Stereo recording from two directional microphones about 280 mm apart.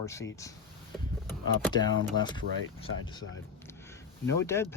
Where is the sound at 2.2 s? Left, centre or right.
Right.